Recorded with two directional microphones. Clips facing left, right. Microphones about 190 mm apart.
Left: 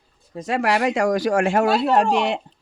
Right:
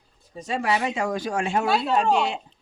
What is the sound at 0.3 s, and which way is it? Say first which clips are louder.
Speech: left 4 dB; 90° left.